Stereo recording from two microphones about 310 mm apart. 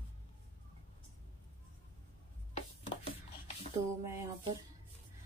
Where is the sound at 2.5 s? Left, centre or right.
Centre.